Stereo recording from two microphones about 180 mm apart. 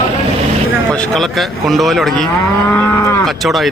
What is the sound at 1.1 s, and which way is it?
A man's voice, centre (ahead or behind).